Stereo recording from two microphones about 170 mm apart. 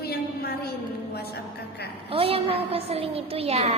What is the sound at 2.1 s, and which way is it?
A woman's voice, 35° right (ahead or behind).